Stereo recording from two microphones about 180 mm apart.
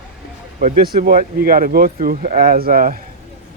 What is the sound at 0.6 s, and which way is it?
A man's voice, 50° right (ahead or behind).